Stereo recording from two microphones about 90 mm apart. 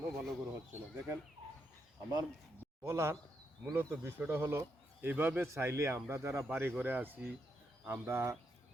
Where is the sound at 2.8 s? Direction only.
30° right (ahead or behind).